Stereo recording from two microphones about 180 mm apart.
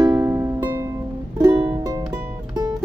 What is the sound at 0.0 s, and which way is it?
Music, 15° right (ahead or behind).